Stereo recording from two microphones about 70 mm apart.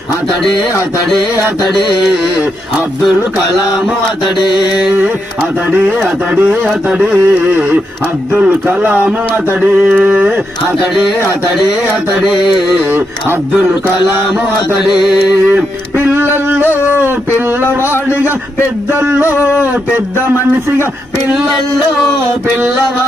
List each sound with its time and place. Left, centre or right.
4.4 s mantra: left
5.7 s speech: right
12.4 s mantra: left
15.4 s speech: right
18.9 s speech: right